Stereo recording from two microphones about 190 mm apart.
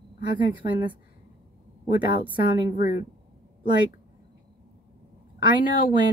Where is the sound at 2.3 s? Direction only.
50° left (ahead or behind).